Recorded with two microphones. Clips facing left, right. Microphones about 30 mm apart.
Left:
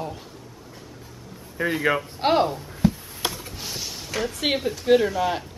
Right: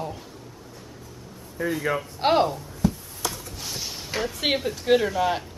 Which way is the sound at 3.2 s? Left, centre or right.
Left.